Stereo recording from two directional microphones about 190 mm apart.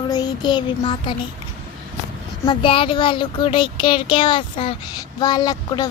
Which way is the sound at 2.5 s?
25° left (ahead or behind).